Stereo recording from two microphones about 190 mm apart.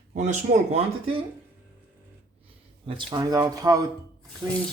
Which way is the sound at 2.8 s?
25° right (ahead or behind).